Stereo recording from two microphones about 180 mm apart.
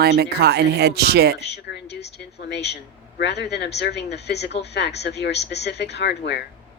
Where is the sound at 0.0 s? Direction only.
65° right (ahead or behind).